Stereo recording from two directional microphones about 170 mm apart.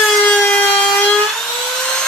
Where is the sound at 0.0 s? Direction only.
5° left (ahead or behind).